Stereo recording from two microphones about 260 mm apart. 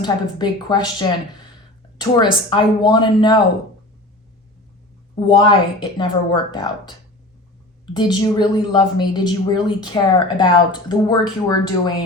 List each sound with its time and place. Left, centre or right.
0.0 s a woman's voice: centre
5.2 s a woman's voice: centre